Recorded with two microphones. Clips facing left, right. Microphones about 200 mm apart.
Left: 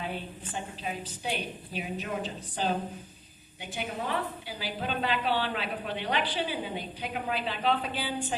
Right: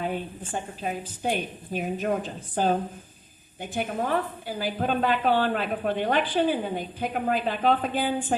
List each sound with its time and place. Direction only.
0.0 s a woman's voice: 50° right (ahead or behind)